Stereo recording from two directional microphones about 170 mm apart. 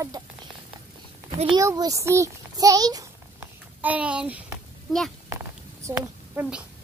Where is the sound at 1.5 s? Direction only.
20° right (ahead or behind).